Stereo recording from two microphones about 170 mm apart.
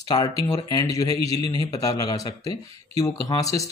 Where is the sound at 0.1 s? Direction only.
20° left (ahead or behind).